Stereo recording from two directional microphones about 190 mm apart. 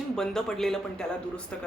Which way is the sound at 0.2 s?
5° left (ahead or behind).